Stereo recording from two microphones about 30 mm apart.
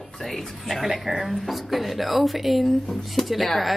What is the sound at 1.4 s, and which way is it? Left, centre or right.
Speech, centre.